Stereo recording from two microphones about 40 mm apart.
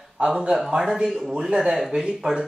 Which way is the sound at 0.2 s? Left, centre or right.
Right.